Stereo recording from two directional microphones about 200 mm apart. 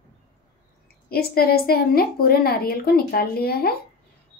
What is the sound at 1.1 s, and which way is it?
A woman's voice, 50° left (ahead or behind).